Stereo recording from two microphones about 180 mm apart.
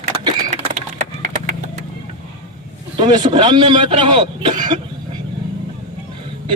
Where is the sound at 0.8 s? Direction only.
45° right (ahead or behind).